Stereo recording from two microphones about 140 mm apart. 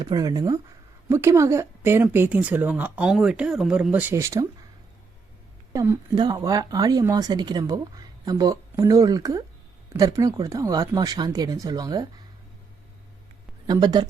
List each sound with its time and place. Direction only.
0.0 s speech: 30° right (ahead or behind)
5.7 s speech: 15° right (ahead or behind)
6.1 s speech: 30° right (ahead or behind)
13.7 s speech: 30° right (ahead or behind)